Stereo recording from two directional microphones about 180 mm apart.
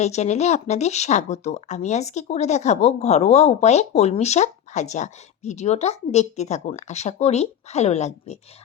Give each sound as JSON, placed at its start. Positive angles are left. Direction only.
{"t": 0.0, "sound": "speech", "side_deg": 40}